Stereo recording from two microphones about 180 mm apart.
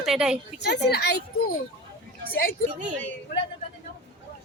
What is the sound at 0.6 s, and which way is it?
Speech, 65° left (ahead or behind).